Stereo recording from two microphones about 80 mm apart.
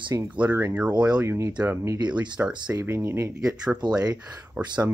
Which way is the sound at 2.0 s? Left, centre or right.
Centre.